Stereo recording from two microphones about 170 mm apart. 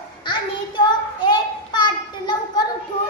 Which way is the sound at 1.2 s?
25° left (ahead or behind).